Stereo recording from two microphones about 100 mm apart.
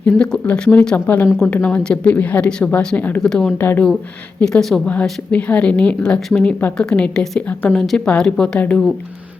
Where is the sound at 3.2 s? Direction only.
5° left (ahead or behind).